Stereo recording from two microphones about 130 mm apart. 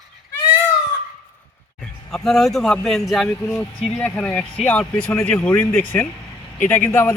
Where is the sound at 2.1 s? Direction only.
5° left (ahead or behind).